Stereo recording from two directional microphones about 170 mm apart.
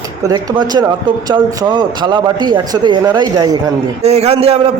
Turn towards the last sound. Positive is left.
turn(degrees=-35)  # may be behind; listen again after turning